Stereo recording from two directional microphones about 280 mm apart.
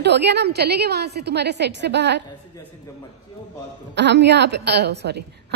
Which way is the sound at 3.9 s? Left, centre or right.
Right.